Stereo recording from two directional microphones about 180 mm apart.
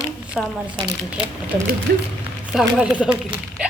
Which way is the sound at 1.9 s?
70° right (ahead or behind).